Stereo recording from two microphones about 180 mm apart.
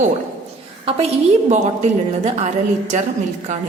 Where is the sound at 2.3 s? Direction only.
40° right (ahead or behind).